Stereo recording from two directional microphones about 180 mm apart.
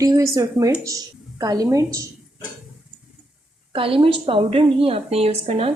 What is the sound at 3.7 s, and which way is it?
A woman's voice, 30° right (ahead or behind).